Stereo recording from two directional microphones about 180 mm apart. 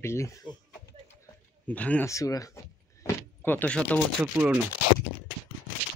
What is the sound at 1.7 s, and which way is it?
Speech, 10° left (ahead or behind).